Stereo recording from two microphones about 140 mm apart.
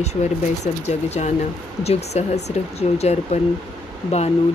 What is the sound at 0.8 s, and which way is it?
Speech, 50° left (ahead or behind).